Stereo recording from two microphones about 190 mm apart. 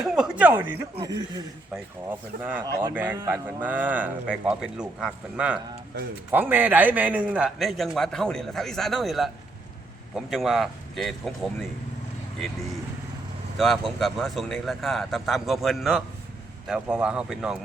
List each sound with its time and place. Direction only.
0.0 s a man's voice: 5° right (ahead or behind)
5.9 s speech: 65° right (ahead or behind)
6.3 s a man's voice: 10° right (ahead or behind)
13.6 s a man's voice: centre (ahead or behind)